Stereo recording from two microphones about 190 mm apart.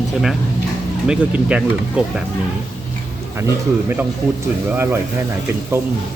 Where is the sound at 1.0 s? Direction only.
5° right (ahead or behind).